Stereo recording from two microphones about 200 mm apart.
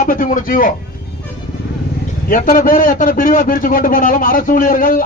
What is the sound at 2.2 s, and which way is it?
A man's voice, 45° left (ahead or behind).